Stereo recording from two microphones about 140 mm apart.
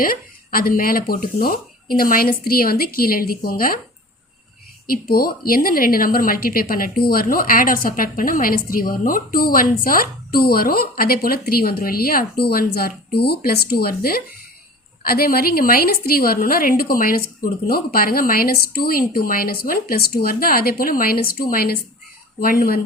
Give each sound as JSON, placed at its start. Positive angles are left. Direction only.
{"t": 0.0, "sound": "a woman's voice", "side_deg": 90}
{"t": 4.9, "sound": "a woman's voice", "side_deg": 90}